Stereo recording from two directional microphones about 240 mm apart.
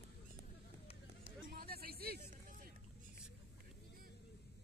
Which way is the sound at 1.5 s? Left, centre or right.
Right.